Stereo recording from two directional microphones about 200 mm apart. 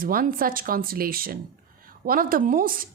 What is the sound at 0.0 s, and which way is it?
A woman's voice, 45° right (ahead or behind).